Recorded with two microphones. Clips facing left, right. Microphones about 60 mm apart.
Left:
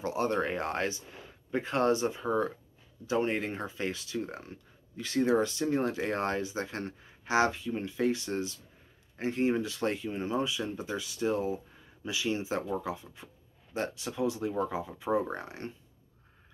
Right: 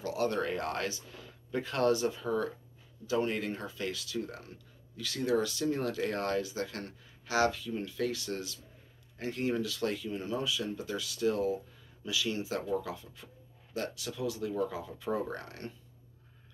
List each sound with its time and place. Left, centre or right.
0.0 s speech: left